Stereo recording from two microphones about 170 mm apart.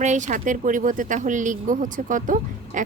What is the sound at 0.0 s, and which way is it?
Speech, 45° right (ahead or behind).